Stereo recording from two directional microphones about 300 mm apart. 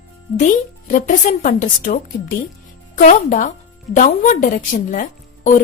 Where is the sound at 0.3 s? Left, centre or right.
Left.